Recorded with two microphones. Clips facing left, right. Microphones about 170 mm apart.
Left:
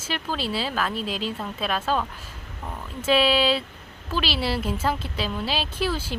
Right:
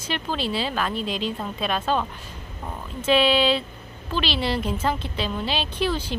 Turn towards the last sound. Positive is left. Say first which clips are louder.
# right 2 dB
turn(degrees=5)  # may be behind; listen again after turning